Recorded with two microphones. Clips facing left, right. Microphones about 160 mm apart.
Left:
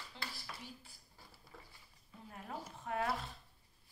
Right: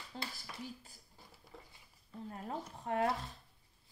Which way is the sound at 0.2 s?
45° right (ahead or behind).